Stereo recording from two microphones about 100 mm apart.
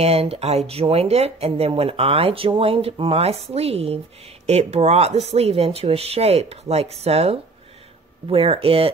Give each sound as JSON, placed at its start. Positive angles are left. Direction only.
{"t": 0.0, "sound": "speech", "side_deg": -90}
{"t": 1.8, "sound": "speech", "side_deg": -75}
{"t": 8.3, "sound": "speech", "side_deg": -75}